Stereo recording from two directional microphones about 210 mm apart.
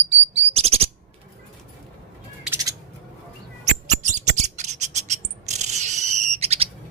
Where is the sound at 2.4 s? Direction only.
15° right (ahead or behind).